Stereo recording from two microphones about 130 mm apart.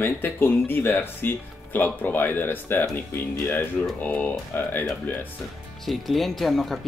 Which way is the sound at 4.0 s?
15° left (ahead or behind).